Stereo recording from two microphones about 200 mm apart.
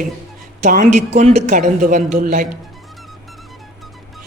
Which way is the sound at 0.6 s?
40° right (ahead or behind).